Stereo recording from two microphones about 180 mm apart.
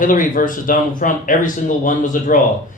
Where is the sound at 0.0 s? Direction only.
50° left (ahead or behind).